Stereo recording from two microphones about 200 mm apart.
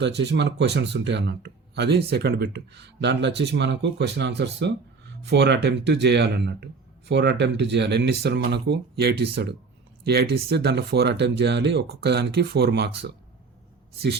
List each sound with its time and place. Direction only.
0.0 s speech: 60° right (ahead or behind)